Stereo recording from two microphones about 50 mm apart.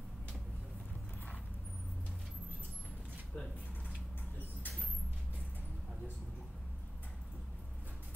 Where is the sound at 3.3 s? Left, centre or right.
Left.